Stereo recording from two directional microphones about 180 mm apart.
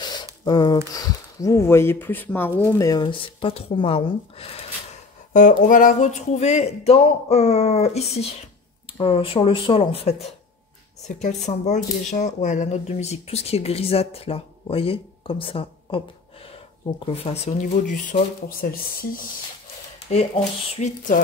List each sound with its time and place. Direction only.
0.0 s squish: 25° left (ahead or behind)
0.5 s speech: 20° left (ahead or behind)
5.3 s speech: 45° left (ahead or behind); by 16.0 s 30° left (ahead or behind)
17.0 s speech: 35° left (ahead or behind); by 19.2 s 55° left (ahead or behind)
20.1 s speech: 40° left (ahead or behind)